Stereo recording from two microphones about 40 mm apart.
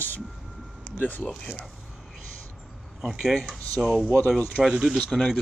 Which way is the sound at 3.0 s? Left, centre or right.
Centre.